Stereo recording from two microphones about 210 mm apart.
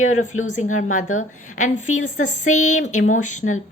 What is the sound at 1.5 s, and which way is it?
A woman's voice, 35° left (ahead or behind).